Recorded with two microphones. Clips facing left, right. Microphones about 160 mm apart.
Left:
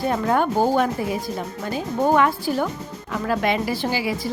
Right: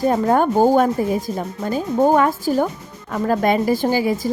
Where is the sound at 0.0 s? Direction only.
40° right (ahead or behind).